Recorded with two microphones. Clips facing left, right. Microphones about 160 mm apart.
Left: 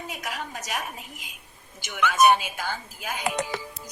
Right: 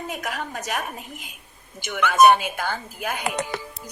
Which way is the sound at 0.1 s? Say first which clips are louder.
Right 4 dB; 50° right (ahead or behind).